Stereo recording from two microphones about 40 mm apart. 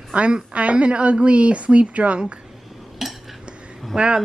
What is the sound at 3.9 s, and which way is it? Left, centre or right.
Speech, right.